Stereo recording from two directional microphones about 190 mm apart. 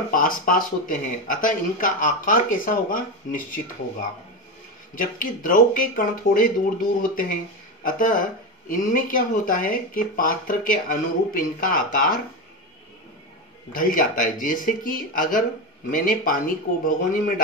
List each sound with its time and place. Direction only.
0.1 s speech: 45° left (ahead or behind)
4.9 s speech: 45° left (ahead or behind)
13.7 s speech: 45° left (ahead or behind)